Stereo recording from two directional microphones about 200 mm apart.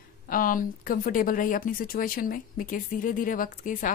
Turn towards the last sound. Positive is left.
turn(degrees=40)  # may be behind; listen again after turning